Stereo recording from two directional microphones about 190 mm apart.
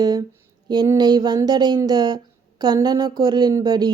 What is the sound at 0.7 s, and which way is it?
Speech, 20° right (ahead or behind).